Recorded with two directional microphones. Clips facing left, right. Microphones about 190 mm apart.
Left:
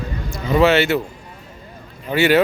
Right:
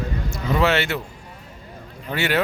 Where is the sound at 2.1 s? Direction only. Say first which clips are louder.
Left 7 dB; 5° left (ahead or behind).